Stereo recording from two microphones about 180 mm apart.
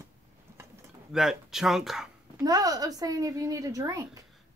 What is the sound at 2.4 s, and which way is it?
Speech, 20° right (ahead or behind).